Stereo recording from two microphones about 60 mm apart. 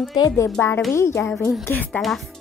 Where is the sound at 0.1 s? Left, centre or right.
Left.